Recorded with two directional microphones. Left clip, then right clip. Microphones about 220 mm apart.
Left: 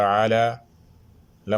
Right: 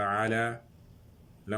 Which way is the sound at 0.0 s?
45° left (ahead or behind).